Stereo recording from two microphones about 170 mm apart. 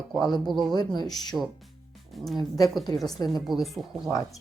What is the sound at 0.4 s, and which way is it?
Speech, centre (ahead or behind).